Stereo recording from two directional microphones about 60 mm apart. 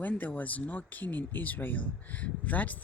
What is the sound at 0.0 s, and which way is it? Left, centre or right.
Speech, left.